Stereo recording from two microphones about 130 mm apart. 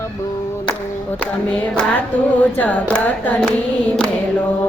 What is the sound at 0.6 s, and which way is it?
Clapping, 10° left (ahead or behind).